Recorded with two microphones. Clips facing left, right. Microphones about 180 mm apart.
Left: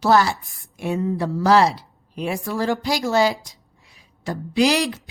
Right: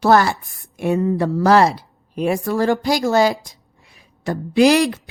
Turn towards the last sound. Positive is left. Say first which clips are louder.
# right 5 dB
turn(degrees=-60)  # may be behind; listen again after turning